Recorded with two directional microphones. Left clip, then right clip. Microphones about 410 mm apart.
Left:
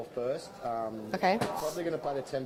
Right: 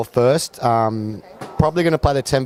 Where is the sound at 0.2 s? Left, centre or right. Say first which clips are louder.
Right 18 dB; right.